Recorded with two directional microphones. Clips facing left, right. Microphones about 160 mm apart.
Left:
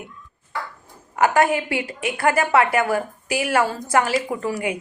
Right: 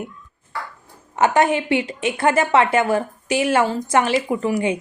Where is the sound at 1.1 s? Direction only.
20° right (ahead or behind).